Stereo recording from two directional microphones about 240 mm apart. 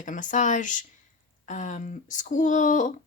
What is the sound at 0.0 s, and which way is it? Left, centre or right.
A woman's voice, left.